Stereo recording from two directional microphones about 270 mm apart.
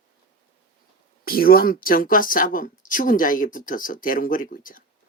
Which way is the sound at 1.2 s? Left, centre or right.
Left.